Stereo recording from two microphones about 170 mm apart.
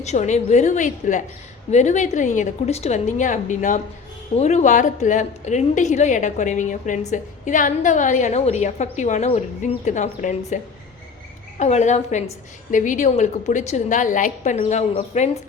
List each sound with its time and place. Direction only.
0.0 s a woman's voice: 40° left (ahead or behind)
11.6 s a woman's voice: 45° left (ahead or behind)